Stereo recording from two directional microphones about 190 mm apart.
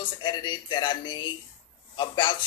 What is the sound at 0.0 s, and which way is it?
Speech, 25° left (ahead or behind).